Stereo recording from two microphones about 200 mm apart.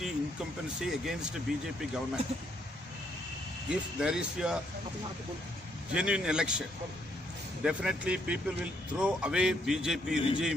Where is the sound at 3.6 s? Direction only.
5° right (ahead or behind).